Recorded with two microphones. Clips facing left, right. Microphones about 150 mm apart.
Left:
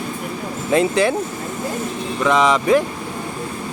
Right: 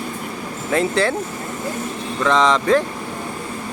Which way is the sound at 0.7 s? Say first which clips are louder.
Left 2 dB; 15° left (ahead or behind).